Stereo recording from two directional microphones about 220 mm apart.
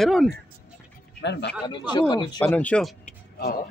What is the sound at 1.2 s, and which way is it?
Speech, 50° left (ahead or behind).